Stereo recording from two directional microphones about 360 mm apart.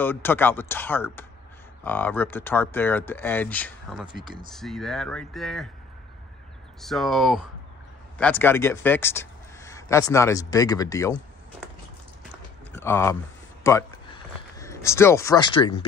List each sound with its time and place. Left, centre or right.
0.0 s speech: centre
6.8 s speech: centre
12.7 s speech: centre
13.7 s a sound: centre